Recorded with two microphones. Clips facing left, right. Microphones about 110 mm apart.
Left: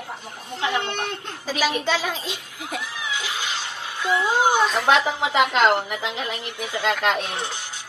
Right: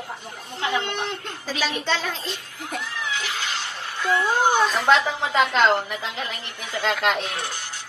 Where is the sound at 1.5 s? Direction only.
10° left (ahead or behind).